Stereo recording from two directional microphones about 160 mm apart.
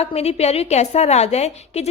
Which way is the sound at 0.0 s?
40° left (ahead or behind).